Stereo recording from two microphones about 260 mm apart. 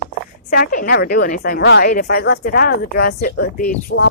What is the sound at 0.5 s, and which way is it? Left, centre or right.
A woman's voice, left.